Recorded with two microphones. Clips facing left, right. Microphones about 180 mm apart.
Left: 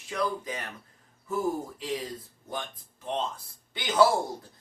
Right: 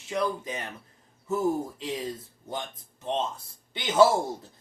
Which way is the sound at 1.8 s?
25° right (ahead or behind).